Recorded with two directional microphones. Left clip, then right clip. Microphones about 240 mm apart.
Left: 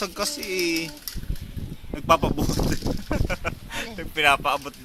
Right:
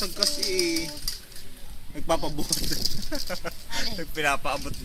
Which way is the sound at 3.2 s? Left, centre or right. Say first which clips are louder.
Left 4 dB; centre.